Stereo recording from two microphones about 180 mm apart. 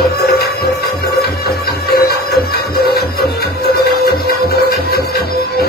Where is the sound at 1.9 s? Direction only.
60° left (ahead or behind).